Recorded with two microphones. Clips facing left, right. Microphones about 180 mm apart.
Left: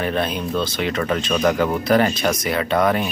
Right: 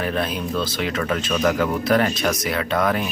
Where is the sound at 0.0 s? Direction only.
Centre (ahead or behind).